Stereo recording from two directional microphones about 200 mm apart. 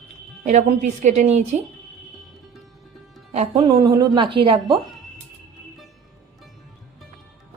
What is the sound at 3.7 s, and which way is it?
Speech, 20° right (ahead or behind).